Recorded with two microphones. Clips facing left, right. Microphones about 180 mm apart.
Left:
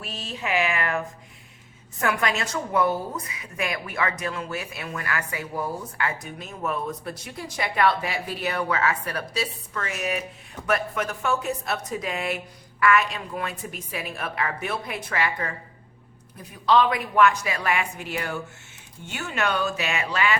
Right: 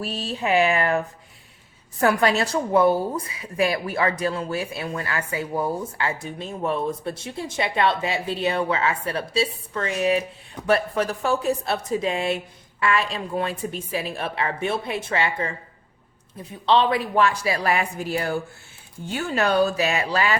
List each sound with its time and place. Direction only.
0.0 s a woman's voice: 35° right (ahead or behind)